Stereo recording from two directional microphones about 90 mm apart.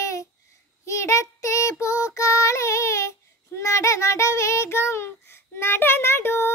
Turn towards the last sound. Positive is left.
turn(degrees=25)  # may be behind; listen again after turning